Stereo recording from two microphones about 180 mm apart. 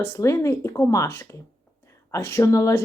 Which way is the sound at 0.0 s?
15° left (ahead or behind).